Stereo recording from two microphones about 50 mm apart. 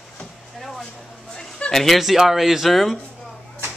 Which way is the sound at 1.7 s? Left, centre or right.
Centre.